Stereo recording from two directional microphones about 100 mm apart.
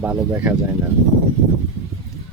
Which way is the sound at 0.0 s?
15° right (ahead or behind).